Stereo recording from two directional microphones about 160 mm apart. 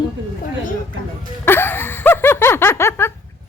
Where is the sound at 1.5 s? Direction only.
15° left (ahead or behind).